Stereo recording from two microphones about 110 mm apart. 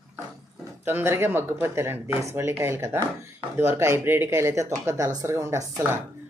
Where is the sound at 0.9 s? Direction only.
20° right (ahead or behind).